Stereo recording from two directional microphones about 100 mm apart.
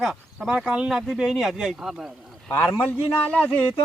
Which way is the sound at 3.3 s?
15° left (ahead or behind).